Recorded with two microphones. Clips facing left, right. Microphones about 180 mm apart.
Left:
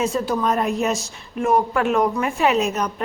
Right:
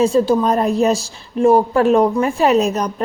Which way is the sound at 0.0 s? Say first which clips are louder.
Right 7 dB; 30° right (ahead or behind).